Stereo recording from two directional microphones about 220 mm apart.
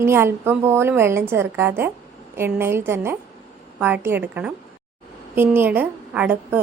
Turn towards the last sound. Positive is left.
turn(degrees=-5)  # may be behind; listen again after turning